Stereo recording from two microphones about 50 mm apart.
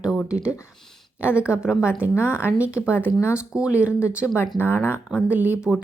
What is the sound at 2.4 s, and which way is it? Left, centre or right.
Speech, right.